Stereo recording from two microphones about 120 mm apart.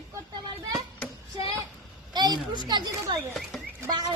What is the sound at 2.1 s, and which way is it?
Speech, 35° right (ahead or behind).